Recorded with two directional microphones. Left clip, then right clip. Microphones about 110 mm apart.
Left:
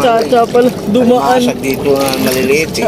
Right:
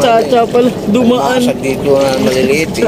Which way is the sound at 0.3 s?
15° right (ahead or behind).